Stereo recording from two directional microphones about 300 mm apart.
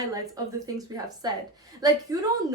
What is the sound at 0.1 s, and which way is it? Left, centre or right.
A woman's voice, centre.